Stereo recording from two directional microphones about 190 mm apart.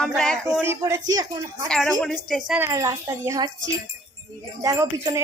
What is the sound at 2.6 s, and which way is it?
Speech, 15° right (ahead or behind).